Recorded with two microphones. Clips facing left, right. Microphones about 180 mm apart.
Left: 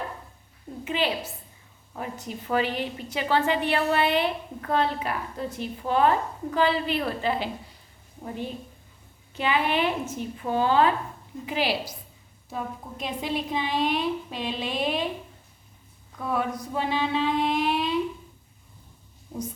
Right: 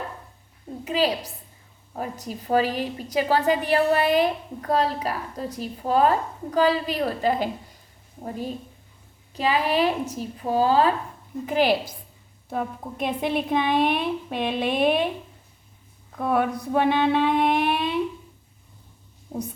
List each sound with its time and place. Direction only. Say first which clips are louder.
0.9 s a woman's voice: right 4 dB; 35° right (ahead or behind)
9.3 s a woman's voice: right 2 dB; 35° right (ahead or behind)
11.4 s a woman's voice: right 6 dB; 50° right (ahead or behind)
16.1 s a woman's voice: right 5 dB; 60° right (ahead or behind)